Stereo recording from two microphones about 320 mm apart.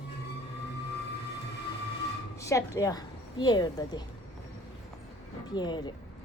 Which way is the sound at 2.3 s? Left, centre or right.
Centre.